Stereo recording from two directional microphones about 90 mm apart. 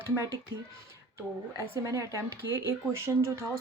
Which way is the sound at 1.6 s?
35° right (ahead or behind).